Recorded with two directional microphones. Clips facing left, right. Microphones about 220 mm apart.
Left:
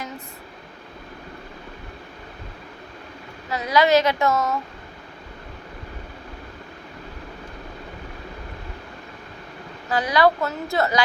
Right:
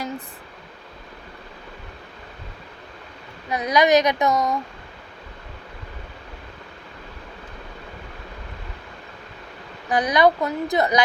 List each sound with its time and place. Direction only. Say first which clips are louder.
3.5 s a child's voice: right 1 dB; 20° right (ahead or behind)
9.9 s a woman's voice: right 1 dB; 20° right (ahead or behind)